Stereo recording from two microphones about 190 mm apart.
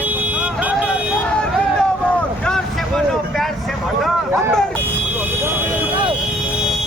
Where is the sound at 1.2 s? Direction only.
5° left (ahead or behind).